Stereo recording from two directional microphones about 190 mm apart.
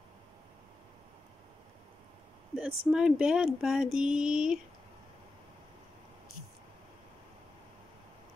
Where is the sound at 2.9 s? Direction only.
5° right (ahead or behind).